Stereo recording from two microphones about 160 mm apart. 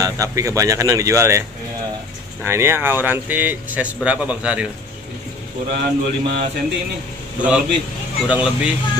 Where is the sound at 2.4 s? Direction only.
15° right (ahead or behind).